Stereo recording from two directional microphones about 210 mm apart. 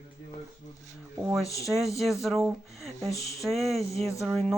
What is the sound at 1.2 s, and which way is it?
Speech, centre (ahead or behind).